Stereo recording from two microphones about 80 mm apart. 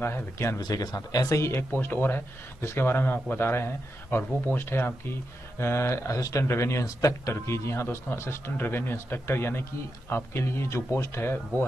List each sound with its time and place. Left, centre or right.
0.0 s speech: left
0.6 s speech: left